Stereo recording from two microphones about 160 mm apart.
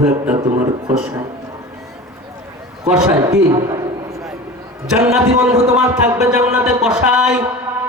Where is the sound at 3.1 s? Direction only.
20° right (ahead or behind).